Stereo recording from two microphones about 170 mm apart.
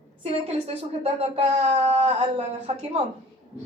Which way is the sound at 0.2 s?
35° right (ahead or behind).